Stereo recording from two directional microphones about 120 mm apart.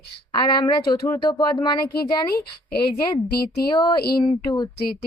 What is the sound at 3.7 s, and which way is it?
Speech, 40° left (ahead or behind).